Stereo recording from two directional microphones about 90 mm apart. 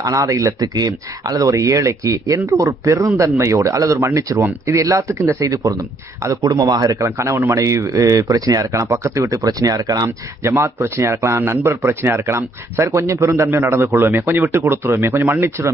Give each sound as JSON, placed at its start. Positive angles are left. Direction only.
{"t": 0.0, "sound": "a man's voice", "side_deg": -40}
{"t": 4.4, "sound": "a man's voice", "side_deg": -20}
{"t": 4.7, "sound": "a man's voice", "side_deg": -35}
{"t": 10.0, "sound": "a man's voice", "side_deg": -30}